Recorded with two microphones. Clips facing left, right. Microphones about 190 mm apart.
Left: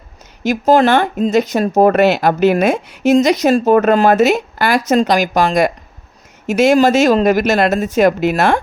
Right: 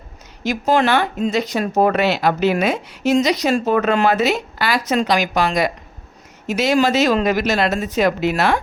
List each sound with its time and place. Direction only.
0.4 s a woman's voice: 45° left (ahead or behind)